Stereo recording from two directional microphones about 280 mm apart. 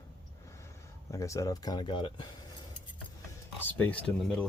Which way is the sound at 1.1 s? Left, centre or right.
Centre.